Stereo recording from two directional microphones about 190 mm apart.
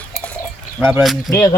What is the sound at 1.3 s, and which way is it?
Speech, 15° left (ahead or behind).